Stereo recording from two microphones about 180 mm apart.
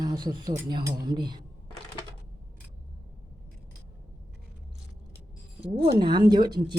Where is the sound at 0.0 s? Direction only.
20° right (ahead or behind).